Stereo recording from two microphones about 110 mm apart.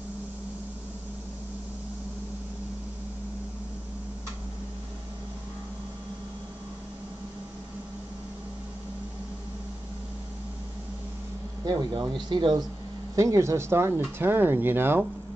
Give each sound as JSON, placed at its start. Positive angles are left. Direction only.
{"t": 11.6, "sound": "speech", "side_deg": -40}
{"t": 13.1, "sound": "speech", "side_deg": -30}